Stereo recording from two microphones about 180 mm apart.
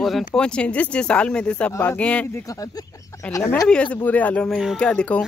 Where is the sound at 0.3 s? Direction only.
5° left (ahead or behind).